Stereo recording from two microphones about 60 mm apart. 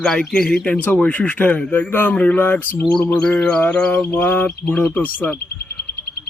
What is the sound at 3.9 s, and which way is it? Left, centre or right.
Bird, left.